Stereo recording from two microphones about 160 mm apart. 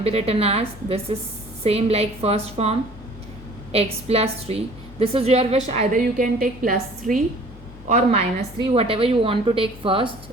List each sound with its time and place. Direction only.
0.0 s a woman's voice: 40° right (ahead or behind); by 7.2 s 60° right (ahead or behind)
7.9 s a woman's voice: 45° right (ahead or behind)